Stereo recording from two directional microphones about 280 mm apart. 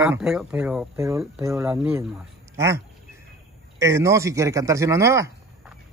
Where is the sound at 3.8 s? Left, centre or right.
Centre.